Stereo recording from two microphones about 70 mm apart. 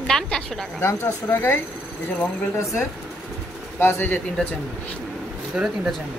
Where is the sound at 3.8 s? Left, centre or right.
Left.